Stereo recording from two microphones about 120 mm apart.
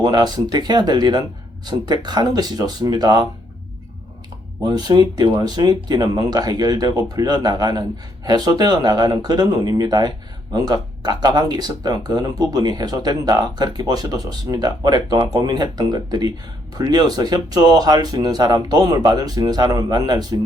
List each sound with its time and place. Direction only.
0.0 s speech: 35° right (ahead or behind)
4.6 s speech: 35° right (ahead or behind)